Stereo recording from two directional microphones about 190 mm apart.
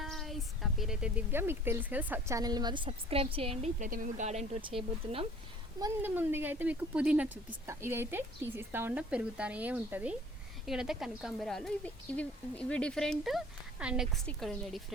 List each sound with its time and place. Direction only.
0.0 s speech: centre (ahead or behind); by 5.2 s 25° right (ahead or behind)
5.8 s a woman's voice: 10° right (ahead or behind)